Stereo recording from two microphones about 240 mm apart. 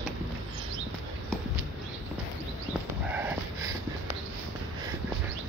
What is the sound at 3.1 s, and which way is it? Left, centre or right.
Dog, centre.